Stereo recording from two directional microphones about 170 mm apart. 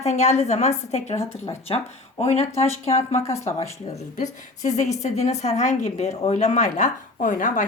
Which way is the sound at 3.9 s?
45° left (ahead or behind).